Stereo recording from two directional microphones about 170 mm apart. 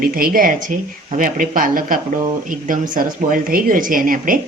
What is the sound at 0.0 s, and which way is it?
A woman's voice, 60° right (ahead or behind).